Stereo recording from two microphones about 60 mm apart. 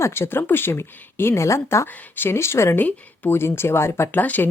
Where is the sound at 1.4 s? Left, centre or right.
Left.